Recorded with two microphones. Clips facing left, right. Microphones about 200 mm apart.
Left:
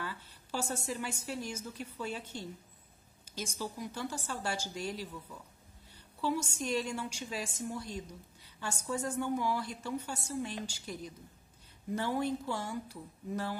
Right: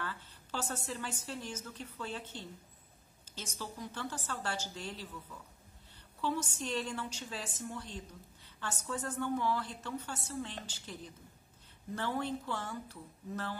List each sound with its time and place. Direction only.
0.0 s a woman's voice: 10° left (ahead or behind)